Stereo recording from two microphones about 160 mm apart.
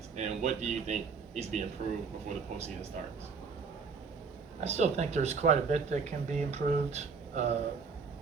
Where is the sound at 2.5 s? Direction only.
45° right (ahead or behind).